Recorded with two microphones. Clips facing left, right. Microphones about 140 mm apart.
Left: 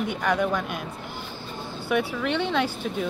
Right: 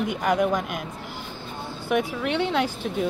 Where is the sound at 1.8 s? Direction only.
5° right (ahead or behind).